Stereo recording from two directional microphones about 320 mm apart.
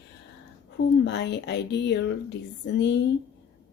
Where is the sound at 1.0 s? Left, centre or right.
Left.